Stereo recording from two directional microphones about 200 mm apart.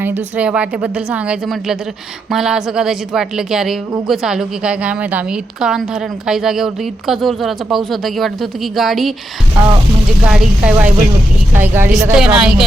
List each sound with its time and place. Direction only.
0.0 s speech: 10° right (ahead or behind)
10.2 s a woman's voice: 5° right (ahead or behind)